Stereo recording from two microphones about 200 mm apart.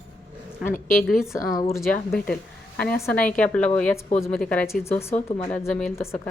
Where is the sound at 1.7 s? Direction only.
5° left (ahead or behind).